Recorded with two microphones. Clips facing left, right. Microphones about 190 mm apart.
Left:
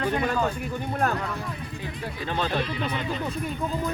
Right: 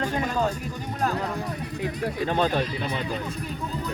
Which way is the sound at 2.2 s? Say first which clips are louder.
Right 3 dB; 45° right (ahead or behind).